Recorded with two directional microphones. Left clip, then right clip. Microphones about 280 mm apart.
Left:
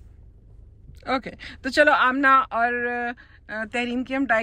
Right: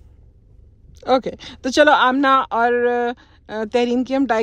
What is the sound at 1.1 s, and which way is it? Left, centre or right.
Speech, right.